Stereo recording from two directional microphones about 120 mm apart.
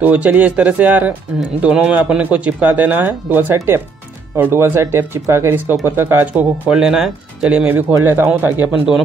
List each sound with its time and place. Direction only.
0.0 s speech: 15° right (ahead or behind)
6.3 s speech: 5° right (ahead or behind)